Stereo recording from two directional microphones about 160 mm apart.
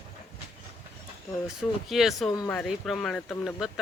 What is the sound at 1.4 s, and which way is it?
Speech, centre (ahead or behind).